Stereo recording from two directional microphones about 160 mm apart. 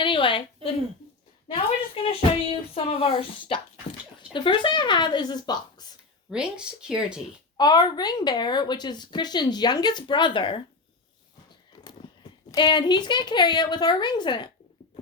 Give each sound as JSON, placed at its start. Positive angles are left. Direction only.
{"t": 0.0, "sound": "a sound", "side_deg": 30}
{"t": 3.2, "sound": "a woman's voice", "side_deg": 30}
{"t": 6.3, "sound": "speech", "side_deg": -5}
{"t": 7.5, "sound": "a woman's voice", "side_deg": 25}
{"t": 12.0, "sound": "a sound", "side_deg": 30}
{"t": 12.5, "sound": "a woman's voice", "side_deg": 30}